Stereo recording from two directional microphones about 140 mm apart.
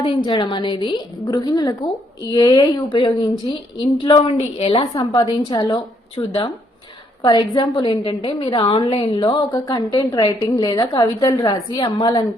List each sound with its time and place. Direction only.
0.0 s a woman's voice: 35° left (ahead or behind)
5.1 s a woman's voice: 30° left (ahead or behind)